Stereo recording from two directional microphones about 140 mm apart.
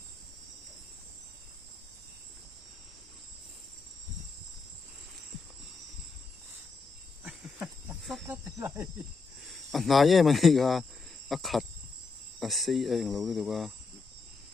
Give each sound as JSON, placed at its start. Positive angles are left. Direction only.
{"t": 7.3, "sound": "a sound", "side_deg": -5}
{"t": 8.3, "sound": "speech", "side_deg": -15}
{"t": 9.5, "sound": "speech", "side_deg": 0}